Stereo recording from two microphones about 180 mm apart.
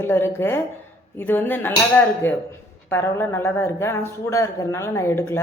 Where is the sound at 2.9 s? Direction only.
15° left (ahead or behind).